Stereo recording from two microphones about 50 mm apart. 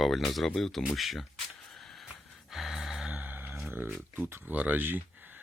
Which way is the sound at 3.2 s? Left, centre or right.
Right.